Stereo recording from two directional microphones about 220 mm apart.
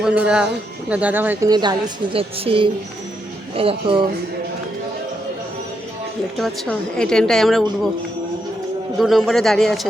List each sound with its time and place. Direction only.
0.0 s speech: 5° right (ahead or behind); by 4.0 s 25° right (ahead or behind)
6.3 s a woman's voice: centre (ahead or behind)
9.0 s a woman's voice: centre (ahead or behind)